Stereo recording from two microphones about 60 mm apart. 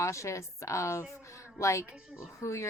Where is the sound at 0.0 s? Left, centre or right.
Left.